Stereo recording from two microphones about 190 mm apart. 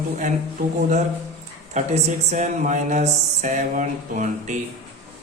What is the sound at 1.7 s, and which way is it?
Speech, 35° right (ahead or behind).